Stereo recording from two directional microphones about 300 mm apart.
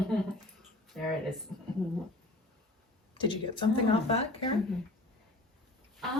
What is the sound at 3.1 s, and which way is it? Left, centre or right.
Speech, centre.